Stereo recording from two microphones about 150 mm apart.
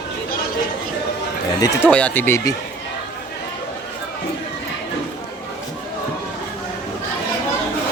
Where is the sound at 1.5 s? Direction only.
25° left (ahead or behind).